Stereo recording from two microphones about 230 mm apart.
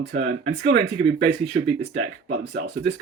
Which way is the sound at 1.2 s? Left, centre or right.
Right.